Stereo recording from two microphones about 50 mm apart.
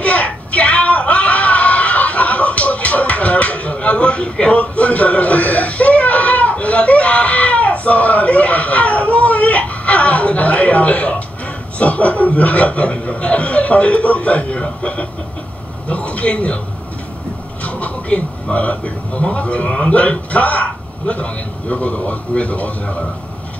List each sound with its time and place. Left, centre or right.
0.0 s a sound: left
11.8 s speech: left
17.6 s a man's voice: left